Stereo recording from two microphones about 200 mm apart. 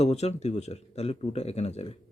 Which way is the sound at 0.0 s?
30° left (ahead or behind).